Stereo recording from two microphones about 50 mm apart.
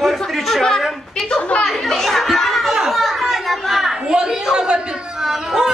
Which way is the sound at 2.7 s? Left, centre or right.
Centre.